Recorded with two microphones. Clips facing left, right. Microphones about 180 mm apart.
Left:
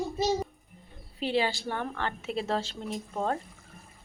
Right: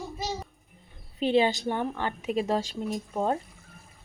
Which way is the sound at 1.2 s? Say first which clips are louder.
Right 5 dB; 20° right (ahead or behind).